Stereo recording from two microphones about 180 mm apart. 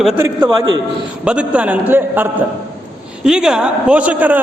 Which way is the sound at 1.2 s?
5° right (ahead or behind).